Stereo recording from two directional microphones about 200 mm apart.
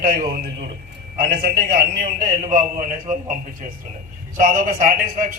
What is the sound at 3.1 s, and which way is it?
Speech, 40° right (ahead or behind).